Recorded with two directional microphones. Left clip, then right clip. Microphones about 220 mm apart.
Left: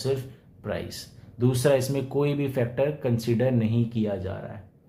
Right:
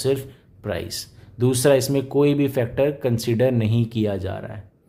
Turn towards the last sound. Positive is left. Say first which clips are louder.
# right 4 dB
turn(degrees=-45)  # may be behind; listen again after turning